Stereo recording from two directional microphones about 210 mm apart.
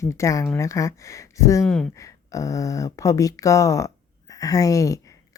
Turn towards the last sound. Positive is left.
turn(degrees=15)  # may be behind; listen again after turning